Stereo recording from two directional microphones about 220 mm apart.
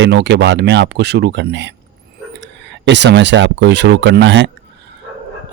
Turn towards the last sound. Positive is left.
turn(degrees=-55)  # may be behind; listen again after turning